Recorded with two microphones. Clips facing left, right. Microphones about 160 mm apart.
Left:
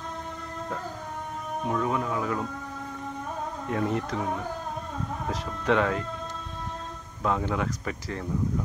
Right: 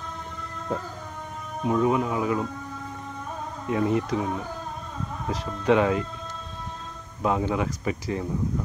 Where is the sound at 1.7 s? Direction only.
15° right (ahead or behind).